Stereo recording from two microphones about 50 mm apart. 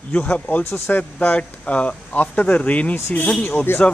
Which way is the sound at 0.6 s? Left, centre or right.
Left.